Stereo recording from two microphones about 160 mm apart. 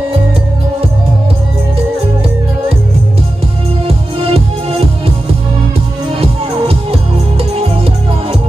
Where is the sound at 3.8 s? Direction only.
40° right (ahead or behind).